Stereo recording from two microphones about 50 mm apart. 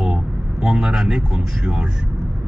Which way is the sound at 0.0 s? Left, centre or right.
Centre.